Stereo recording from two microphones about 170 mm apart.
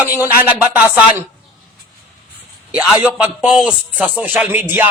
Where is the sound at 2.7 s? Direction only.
5° right (ahead or behind).